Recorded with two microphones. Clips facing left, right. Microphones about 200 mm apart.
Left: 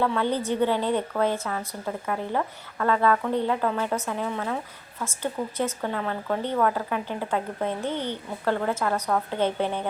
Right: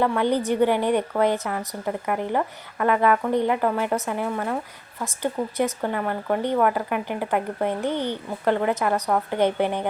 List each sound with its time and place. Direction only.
0.0 s speech: 15° right (ahead or behind)